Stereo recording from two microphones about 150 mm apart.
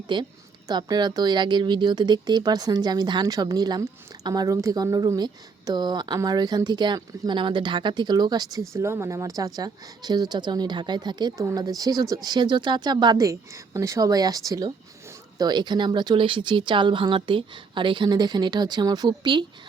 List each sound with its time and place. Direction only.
0.1 s a woman's voice: 30° right (ahead or behind)